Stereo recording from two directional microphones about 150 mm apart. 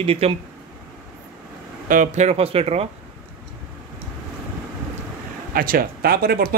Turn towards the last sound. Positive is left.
turn(degrees=-75)  # may be behind; listen again after turning